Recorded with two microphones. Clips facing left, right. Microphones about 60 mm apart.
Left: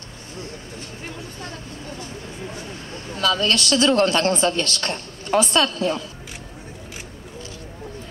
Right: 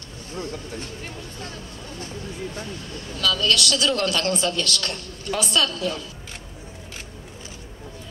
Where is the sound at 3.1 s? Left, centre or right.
Left.